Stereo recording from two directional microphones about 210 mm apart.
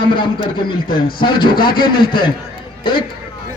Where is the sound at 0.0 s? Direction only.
25° left (ahead or behind).